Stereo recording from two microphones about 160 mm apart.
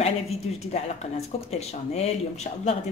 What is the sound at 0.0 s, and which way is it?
Speech, 40° left (ahead or behind).